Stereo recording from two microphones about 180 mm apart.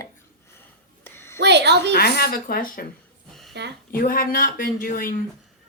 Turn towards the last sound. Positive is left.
turn(degrees=50)  # may be behind; listen again after turning